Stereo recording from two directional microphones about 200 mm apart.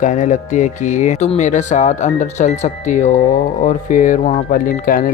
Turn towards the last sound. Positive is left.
turn(degrees=45)  # may be behind; listen again after turning